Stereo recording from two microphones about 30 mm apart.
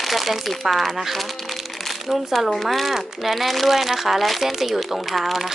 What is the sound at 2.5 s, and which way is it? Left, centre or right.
Speech, centre.